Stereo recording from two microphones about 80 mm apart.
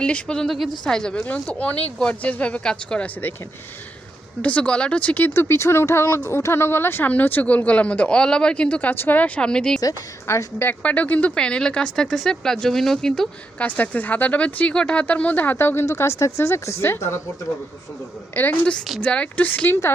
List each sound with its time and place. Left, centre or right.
0.0 s speech: centre
4.4 s speech: centre
10.2 s a woman's voice: left
10.8 s speech: centre
13.6 s speech: left
18.4 s speech: left
18.9 s speech: centre
19.6 s a woman's voice: left